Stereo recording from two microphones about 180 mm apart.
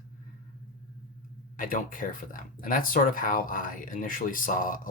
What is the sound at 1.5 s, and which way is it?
Speech, 50° left (ahead or behind).